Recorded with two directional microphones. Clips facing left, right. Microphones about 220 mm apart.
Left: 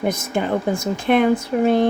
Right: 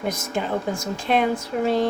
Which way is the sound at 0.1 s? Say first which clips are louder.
Left 4 dB; 55° left (ahead or behind).